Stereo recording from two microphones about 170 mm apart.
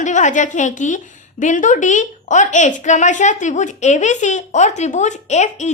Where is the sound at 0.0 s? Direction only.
45° left (ahead or behind).